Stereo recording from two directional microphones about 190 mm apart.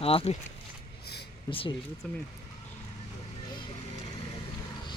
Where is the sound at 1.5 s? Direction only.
20° left (ahead or behind).